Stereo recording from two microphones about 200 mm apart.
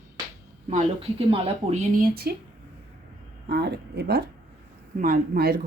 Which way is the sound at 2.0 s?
50° right (ahead or behind).